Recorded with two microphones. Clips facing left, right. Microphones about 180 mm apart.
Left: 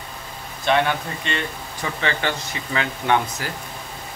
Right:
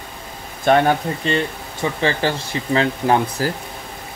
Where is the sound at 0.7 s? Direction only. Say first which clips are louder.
Right 5 dB; 45° right (ahead or behind).